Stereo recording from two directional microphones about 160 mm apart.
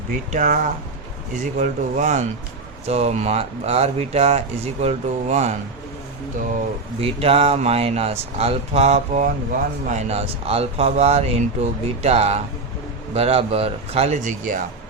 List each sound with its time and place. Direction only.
0.3 s speech: 55° right (ahead or behind)
7.0 s speech: 40° right (ahead or behind)